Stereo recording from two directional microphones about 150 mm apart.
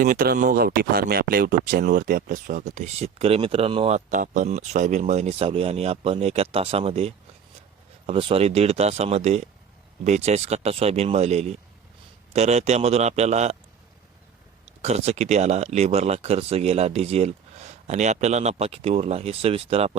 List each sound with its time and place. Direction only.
0.0 s speech: 75° right (ahead or behind); by 13.6 s 50° right (ahead or behind)
14.8 s speech: 45° right (ahead or behind)